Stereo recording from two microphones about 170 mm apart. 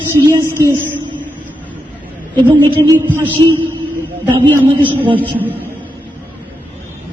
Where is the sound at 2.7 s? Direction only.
30° right (ahead or behind).